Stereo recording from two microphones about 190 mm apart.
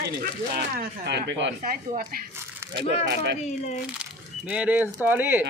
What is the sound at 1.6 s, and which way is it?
Speech, 50° right (ahead or behind).